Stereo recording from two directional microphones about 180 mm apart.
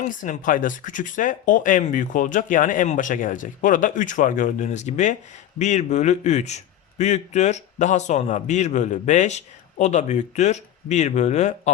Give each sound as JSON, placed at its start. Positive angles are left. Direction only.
{"t": 0.0, "sound": "a man's voice", "side_deg": 45}